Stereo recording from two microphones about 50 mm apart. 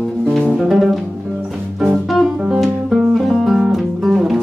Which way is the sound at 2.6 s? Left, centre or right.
Centre.